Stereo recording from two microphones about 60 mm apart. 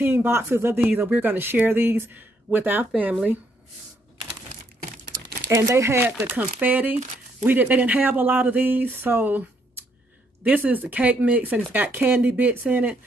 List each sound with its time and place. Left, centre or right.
0.0 s speech: right
5.1 s crumpling: right
5.6 s speech: right
6.2 s speech: right